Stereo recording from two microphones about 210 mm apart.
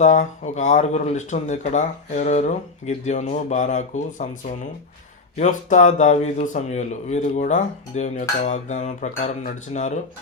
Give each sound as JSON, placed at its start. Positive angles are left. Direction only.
{"t": 0.0, "sound": "speech", "side_deg": 35}